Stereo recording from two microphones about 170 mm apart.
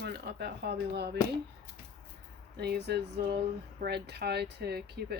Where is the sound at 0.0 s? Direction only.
75° right (ahead or behind).